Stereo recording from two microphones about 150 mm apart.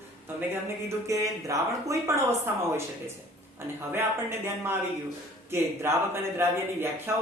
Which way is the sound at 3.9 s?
15° right (ahead or behind).